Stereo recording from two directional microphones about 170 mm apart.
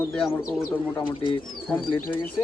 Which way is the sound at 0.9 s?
30° left (ahead or behind).